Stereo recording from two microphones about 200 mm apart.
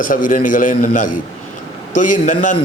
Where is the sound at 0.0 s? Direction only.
40° left (ahead or behind).